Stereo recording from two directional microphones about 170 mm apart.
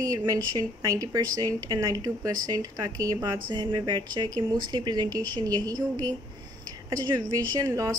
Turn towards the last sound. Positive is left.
turn(degrees=-20)  # may be behind; listen again after turning